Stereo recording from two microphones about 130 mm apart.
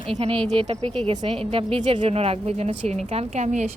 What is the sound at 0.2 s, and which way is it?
A woman's voice, 50° right (ahead or behind).